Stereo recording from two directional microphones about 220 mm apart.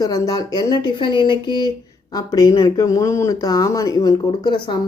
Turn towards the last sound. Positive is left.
turn(degrees=20)  # may be behind; listen again after turning